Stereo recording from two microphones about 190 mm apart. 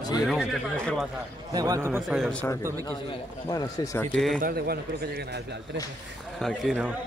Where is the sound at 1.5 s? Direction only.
20° right (ahead or behind).